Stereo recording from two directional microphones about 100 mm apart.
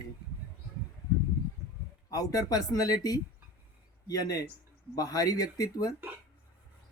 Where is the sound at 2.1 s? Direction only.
40° left (ahead or behind).